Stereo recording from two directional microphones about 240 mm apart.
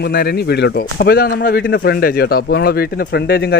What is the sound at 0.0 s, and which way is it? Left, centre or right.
Speech, left.